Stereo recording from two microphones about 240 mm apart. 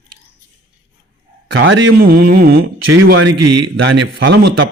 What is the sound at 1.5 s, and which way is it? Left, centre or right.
Speech, right.